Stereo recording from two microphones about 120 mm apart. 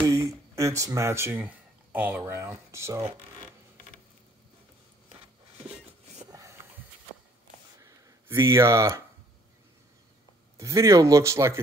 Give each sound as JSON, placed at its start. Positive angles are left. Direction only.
{"t": 0.0, "sound": "speech", "side_deg": -25}
{"t": 7.8, "sound": "a sound", "side_deg": -25}
{"t": 10.6, "sound": "speech", "side_deg": -25}